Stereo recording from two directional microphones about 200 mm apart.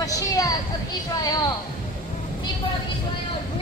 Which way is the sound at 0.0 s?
15° left (ahead or behind).